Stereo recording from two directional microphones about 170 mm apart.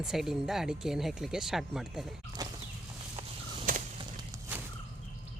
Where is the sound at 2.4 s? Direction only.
20° right (ahead or behind).